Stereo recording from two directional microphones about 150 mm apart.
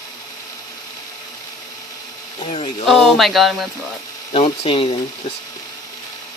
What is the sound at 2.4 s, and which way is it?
Speech, 40° left (ahead or behind).